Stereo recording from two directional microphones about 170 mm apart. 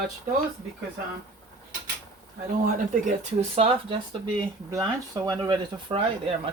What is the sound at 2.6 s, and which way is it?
Speech, 40° right (ahead or behind).